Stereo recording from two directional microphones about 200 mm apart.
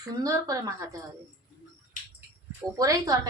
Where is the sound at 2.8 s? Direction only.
20° right (ahead or behind).